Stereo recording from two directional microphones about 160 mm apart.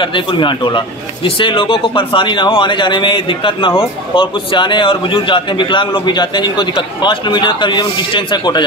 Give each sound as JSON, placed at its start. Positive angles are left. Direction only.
{"t": 0.0, "sound": "speech", "side_deg": 30}